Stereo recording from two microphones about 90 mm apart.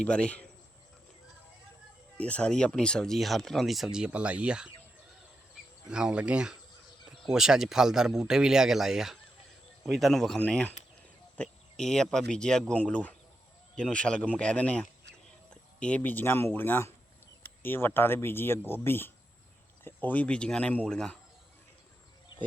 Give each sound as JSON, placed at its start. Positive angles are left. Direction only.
{"t": 0.0, "sound": "speech", "side_deg": 10}
{"t": 2.1, "sound": "speech", "side_deg": 15}
{"t": 5.9, "sound": "speech", "side_deg": -10}